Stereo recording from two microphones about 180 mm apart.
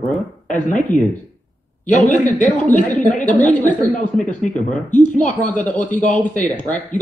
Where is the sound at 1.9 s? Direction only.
45° left (ahead or behind).